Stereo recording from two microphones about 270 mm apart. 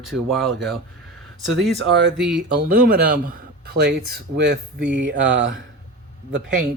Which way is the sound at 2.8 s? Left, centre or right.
Right.